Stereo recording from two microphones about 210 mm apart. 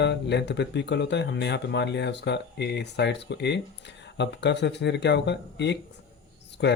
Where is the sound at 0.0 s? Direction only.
55° left (ahead or behind).